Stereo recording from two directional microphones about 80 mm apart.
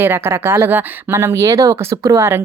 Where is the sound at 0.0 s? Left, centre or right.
Right.